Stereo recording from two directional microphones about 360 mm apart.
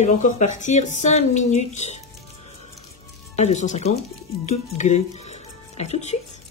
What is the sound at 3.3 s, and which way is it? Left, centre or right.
Speech, centre.